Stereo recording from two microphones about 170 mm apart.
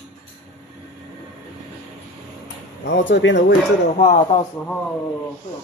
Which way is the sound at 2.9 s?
90° left.